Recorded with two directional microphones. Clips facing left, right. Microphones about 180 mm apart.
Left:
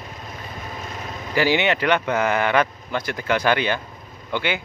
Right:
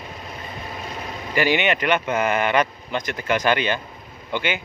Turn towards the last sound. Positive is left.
turn(degrees=-15)  # may be behind; listen again after turning